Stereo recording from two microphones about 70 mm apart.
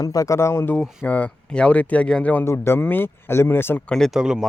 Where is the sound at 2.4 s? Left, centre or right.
Left.